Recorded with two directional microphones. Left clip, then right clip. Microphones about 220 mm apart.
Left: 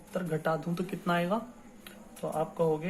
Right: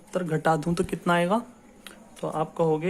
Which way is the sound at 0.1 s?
40° right (ahead or behind).